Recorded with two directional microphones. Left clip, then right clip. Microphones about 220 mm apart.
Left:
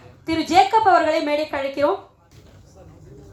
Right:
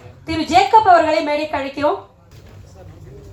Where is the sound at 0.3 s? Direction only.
50° left (ahead or behind).